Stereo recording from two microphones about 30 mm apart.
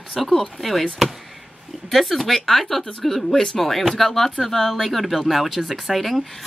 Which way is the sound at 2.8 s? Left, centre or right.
Left.